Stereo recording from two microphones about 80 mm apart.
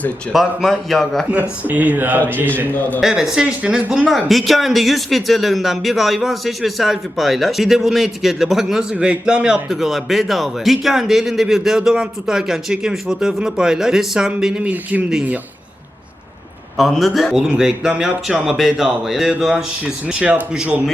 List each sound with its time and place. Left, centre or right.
0.3 s speech: centre
1.3 s a man's voice: right
3.0 s speech: centre
9.6 s speech: centre
16.7 s speech: centre